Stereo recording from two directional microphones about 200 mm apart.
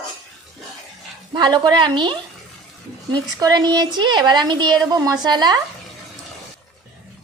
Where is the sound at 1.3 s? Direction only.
20° right (ahead or behind).